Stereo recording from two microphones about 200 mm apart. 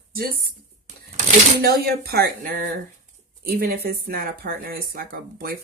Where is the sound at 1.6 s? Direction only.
50° right (ahead or behind).